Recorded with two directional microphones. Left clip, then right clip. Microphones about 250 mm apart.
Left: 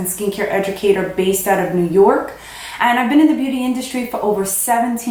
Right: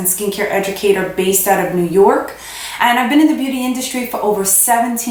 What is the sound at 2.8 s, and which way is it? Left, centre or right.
A woman's voice, centre.